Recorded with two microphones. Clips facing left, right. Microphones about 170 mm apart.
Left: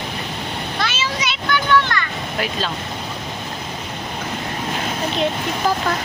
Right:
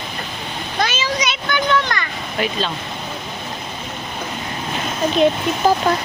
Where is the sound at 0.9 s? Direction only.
20° right (ahead or behind).